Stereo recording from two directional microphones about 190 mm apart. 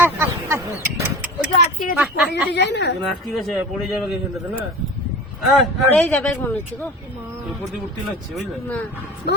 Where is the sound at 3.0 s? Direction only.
Centre (ahead or behind).